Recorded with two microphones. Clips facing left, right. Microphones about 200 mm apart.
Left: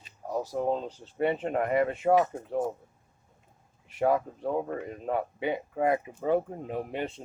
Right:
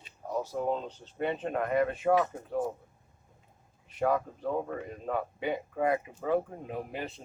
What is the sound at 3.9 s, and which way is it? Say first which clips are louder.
Speech: left 3 dB; 30° left (ahead or behind).